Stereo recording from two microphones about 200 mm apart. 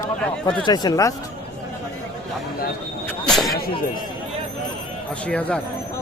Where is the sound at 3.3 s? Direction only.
Centre (ahead or behind).